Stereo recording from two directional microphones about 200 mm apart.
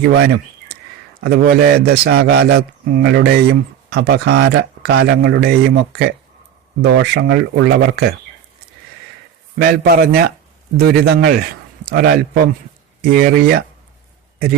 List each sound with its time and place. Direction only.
1.2 s speech: 55° right (ahead or behind)
9.6 s a man's voice: 50° right (ahead or behind)